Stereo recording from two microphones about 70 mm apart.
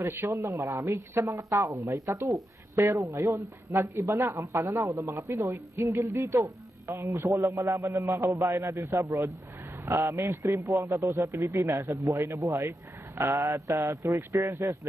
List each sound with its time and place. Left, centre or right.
0.0 s a man's voice: right
0.9 s a man's voice: right
2.7 s speech: right
3.2 s a man's voice: right
3.8 s a man's voice: right
10.4 s a man's voice: right
11.4 s speech: right
14.3 s speech: right